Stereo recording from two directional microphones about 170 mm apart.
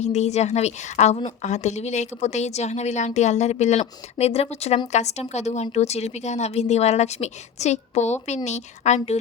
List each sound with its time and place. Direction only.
0.0 s a woman's voice: 40° left (ahead or behind)